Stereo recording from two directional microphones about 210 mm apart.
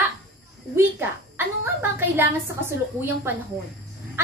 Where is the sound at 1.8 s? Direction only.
10° right (ahead or behind).